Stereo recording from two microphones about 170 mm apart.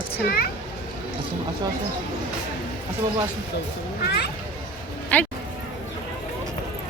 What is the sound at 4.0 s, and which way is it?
Children playing, 70° left (ahead or behind).